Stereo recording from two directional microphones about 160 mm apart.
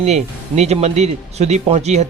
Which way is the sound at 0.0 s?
45° right (ahead or behind).